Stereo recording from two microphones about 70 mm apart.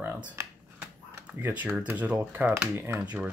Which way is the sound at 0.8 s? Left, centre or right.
Right.